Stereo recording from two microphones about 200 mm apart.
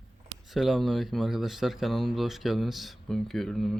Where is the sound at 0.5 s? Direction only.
Centre (ahead or behind).